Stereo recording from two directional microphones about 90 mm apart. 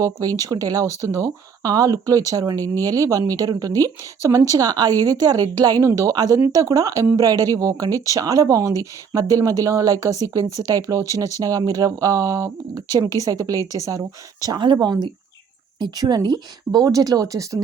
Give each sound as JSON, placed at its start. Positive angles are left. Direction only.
{"t": 0.0, "sound": "speech", "side_deg": -40}
{"t": 5.8, "sound": "speech", "side_deg": -35}
{"t": 14.6, "sound": "speech", "side_deg": -55}